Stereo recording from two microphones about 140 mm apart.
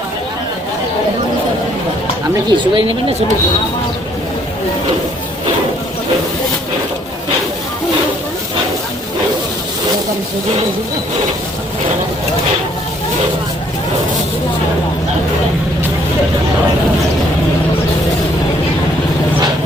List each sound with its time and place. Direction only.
2.5 s speech: 40° right (ahead or behind)